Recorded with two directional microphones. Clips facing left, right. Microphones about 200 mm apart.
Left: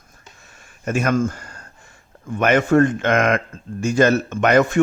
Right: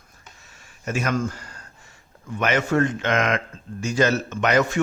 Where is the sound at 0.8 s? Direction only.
50° left (ahead or behind).